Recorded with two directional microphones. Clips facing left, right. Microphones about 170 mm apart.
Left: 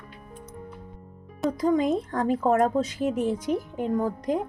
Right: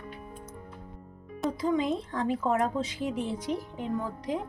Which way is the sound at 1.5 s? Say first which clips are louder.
Left 5 dB; 45° left (ahead or behind).